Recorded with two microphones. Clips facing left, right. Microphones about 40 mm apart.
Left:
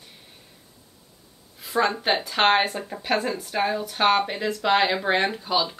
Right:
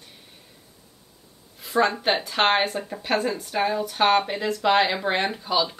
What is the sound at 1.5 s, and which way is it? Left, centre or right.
Speech, centre.